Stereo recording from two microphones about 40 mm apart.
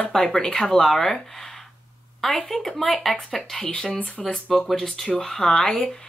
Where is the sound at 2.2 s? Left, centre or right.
Centre.